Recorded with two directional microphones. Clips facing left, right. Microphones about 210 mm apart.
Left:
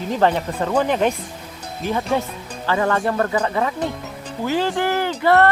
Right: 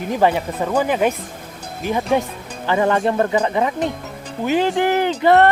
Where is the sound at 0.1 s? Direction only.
10° right (ahead or behind).